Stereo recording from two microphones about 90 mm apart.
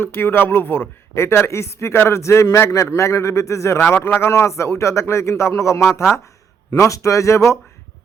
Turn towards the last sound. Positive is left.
turn(degrees=35)  # may be behind; listen again after turning